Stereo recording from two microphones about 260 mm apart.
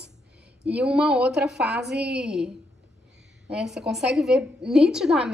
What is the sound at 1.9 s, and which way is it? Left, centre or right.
Speech, right.